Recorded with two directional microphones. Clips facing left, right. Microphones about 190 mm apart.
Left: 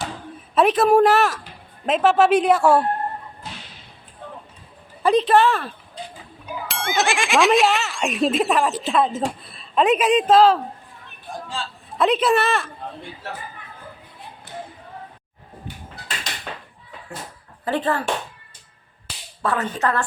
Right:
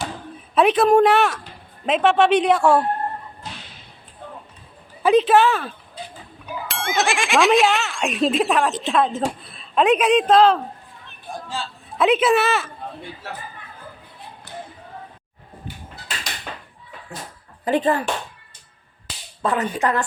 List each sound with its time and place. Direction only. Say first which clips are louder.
0.5 s speech: right 1 dB; centre (ahead or behind)
5.0 s a man's voice: right 1 dB; centre (ahead or behind)
14.5 s a sound: left 1 dB; 25° left (ahead or behind)
17.7 s speech: right 3 dB; 15° right (ahead or behind)
19.4 s speech: right 1 dB; 20° right (ahead or behind)